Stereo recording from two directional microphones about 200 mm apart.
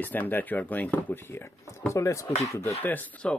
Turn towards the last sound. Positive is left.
turn(degrees=5)  # may be behind; listen again after turning